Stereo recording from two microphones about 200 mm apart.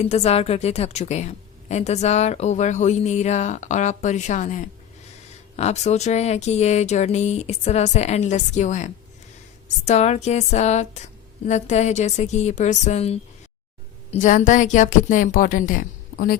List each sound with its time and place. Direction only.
0.0 s a woman's voice: 35° left (ahead or behind)